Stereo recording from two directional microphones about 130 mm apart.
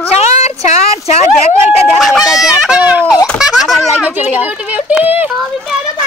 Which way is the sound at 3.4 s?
Centre (ahead or behind).